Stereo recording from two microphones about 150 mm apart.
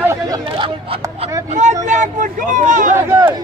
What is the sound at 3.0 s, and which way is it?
Speech, 20° right (ahead or behind).